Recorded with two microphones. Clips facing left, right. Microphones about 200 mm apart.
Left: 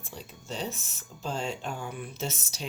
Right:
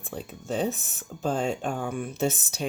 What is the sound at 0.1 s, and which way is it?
Speech, 55° right (ahead or behind).